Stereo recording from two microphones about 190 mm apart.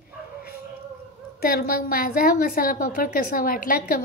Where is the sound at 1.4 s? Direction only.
50° left (ahead or behind).